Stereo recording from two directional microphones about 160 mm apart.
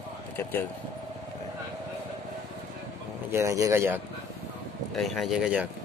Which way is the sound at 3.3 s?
15° right (ahead or behind).